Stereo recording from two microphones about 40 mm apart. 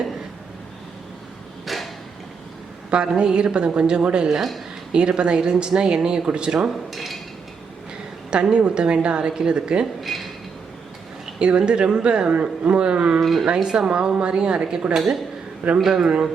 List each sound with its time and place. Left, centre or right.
1.6 s a sound: centre
2.9 s speech: right
4.4 s speech: centre
4.9 s speech: right
6.9 s speech: centre
8.3 s speech: right
10.1 s a sound: centre
11.3 s speech: right
13.1 s speech: centre
13.4 s speech: right; by 16.0 s centre